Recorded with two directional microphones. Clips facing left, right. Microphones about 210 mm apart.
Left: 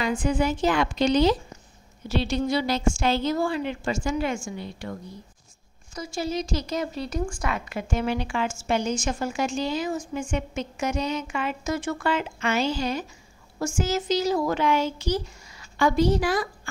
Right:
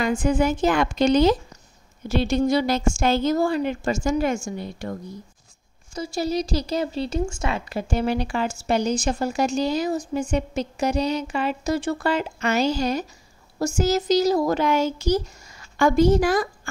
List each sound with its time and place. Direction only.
0.0 s a woman's voice: 45° right (ahead or behind)
5.9 s a woman's voice: 35° right (ahead or behind)